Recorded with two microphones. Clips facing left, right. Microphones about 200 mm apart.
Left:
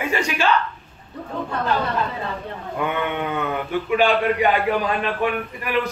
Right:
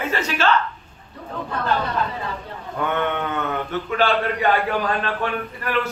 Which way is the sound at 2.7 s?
10° left (ahead or behind).